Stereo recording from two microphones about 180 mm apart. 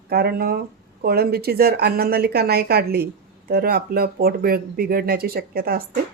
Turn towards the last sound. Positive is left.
turn(degrees=-55)  # may be behind; listen again after turning